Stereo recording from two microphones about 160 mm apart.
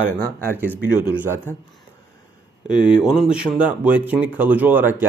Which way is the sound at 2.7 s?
5° right (ahead or behind).